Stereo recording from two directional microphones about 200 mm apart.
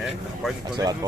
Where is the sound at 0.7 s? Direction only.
20° right (ahead or behind).